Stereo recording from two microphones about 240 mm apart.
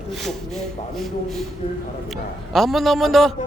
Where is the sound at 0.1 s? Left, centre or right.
Centre.